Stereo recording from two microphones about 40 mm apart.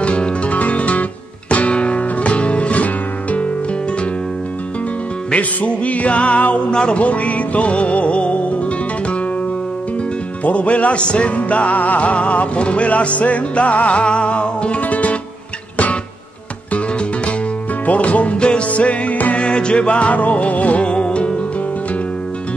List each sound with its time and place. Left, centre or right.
0.0 s music: left
5.3 s music: left
6.7 s music: left
7.0 s music: left
10.4 s music: left
14.8 s music: left
17.8 s music: left
19.4 s music: left